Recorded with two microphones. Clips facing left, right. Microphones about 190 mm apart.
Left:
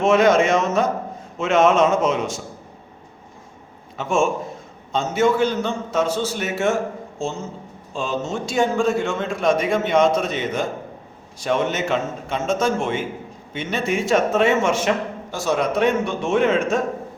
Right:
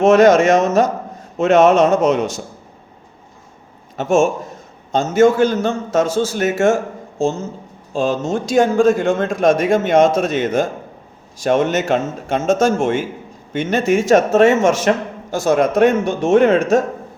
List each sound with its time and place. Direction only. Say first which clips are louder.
0.0 s speech: right 5 dB; 40° right (ahead or behind)
4.4 s a sound: left 1 dB; 45° right (ahead or behind)
5.1 s speech: right 6 dB; 45° right (ahead or behind)